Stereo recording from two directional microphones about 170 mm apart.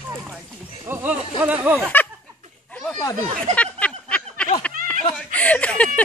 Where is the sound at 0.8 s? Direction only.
15° right (ahead or behind).